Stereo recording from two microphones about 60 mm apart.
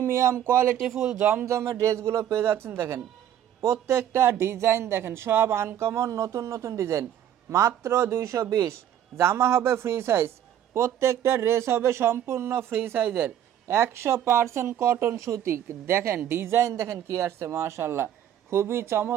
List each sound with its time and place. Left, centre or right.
0.0 s speech: right
0.8 s speech: centre
1.2 s speech: right
1.5 s speech: right
6.1 s speech: right
15.1 s speech: right